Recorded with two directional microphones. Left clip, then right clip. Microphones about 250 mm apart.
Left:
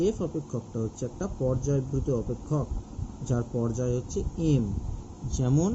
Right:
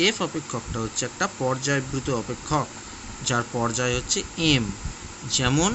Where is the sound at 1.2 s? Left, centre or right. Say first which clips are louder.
Right 5 dB; right.